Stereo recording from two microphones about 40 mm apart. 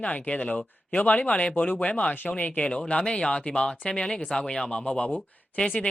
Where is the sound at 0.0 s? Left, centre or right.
Left; by 4.7 s centre.